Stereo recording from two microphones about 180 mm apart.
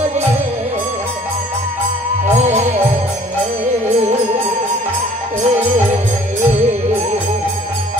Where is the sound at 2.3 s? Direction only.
40° right (ahead or behind).